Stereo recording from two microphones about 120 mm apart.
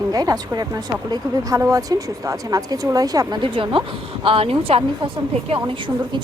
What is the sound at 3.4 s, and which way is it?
A woman's voice, 45° right (ahead or behind).